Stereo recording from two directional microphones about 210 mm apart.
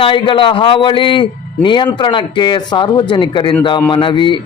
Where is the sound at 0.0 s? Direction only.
25° left (ahead or behind).